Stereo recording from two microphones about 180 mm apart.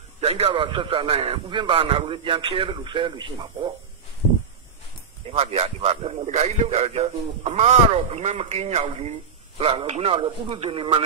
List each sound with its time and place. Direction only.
0.2 s a man's voice: 35° right (ahead or behind)
5.3 s a man's voice: 35° right (ahead or behind)